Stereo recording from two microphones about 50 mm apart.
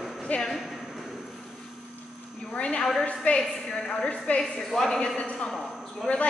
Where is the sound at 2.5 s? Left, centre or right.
Left.